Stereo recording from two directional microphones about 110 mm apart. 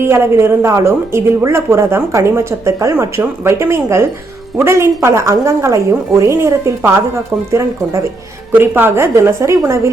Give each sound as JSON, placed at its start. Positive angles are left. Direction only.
{"t": 0.0, "sound": "speech", "side_deg": -20}